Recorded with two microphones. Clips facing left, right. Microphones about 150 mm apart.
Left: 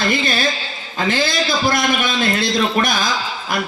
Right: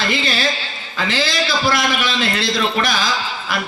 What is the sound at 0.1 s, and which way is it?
A man's voice, 50° left (ahead or behind).